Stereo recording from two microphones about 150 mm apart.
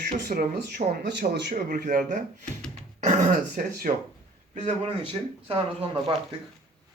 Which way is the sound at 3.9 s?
55° right (ahead or behind).